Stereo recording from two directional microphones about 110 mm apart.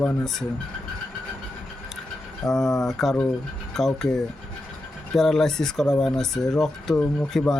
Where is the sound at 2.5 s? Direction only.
Centre (ahead or behind).